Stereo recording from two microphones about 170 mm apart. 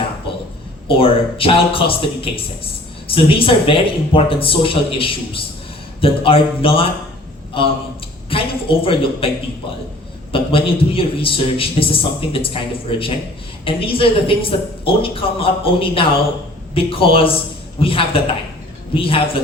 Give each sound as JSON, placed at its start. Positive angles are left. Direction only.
{"t": 0.9, "sound": "a woman's voice", "side_deg": 35}
{"t": 10.3, "sound": "a woman's voice", "side_deg": 35}
{"t": 13.7, "sound": "a woman's voice", "side_deg": 35}